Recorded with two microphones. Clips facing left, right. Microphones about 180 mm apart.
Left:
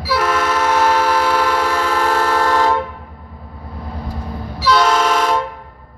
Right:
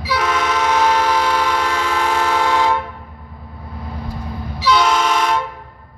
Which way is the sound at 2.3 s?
10° right (ahead or behind).